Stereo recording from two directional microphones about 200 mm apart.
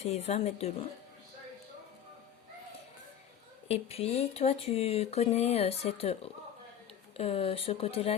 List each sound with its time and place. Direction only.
0.0 s speech: 30° left (ahead or behind)
3.7 s speech: 30° left (ahead or behind)
7.2 s speech: 30° left (ahead or behind)